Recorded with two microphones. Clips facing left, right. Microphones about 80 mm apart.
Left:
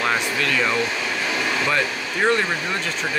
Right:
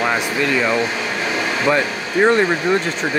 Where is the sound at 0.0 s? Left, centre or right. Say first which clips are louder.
Right 3 dB; centre.